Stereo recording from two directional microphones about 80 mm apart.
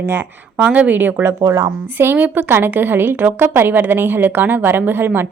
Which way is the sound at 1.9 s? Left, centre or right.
Right.